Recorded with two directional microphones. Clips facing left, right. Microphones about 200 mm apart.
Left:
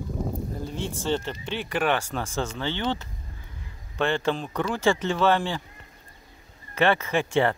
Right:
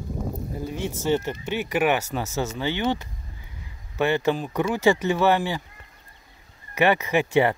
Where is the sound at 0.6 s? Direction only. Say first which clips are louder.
Right 5 dB; 10° right (ahead or behind).